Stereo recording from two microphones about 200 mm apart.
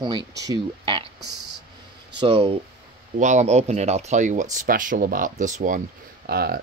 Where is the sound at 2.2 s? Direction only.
25° right (ahead or behind).